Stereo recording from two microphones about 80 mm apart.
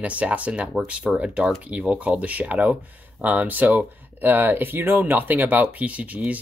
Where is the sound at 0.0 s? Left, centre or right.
Centre.